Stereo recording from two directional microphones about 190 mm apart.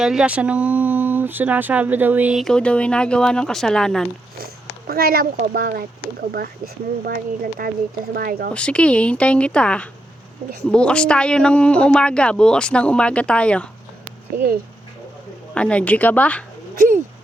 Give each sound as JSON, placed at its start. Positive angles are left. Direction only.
{"t": 0.0, "sound": "speech", "side_deg": -5}
{"t": 4.4, "sound": "speech", "side_deg": -55}
{"t": 7.0, "sound": "speech", "side_deg": -50}
{"t": 8.5, "sound": "speech", "side_deg": 5}
{"t": 14.3, "sound": "speech", "side_deg": -50}
{"t": 15.5, "sound": "a woman's voice", "side_deg": 5}